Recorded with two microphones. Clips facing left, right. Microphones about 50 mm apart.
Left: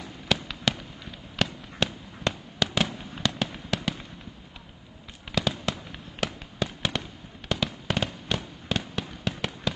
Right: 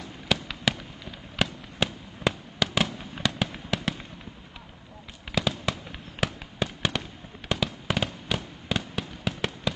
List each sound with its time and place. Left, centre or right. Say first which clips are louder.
0.5 s fireworks: right 1 dB; centre
5.4 s fireworks: even; centre